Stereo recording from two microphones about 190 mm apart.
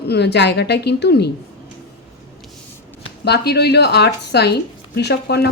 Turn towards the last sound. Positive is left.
turn(degrees=60)  # may be behind; listen again after turning